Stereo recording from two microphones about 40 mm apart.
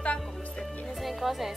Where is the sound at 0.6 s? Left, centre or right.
Centre.